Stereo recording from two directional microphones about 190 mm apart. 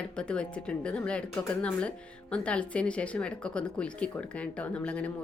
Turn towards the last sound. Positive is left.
turn(degrees=5)  # may be behind; listen again after turning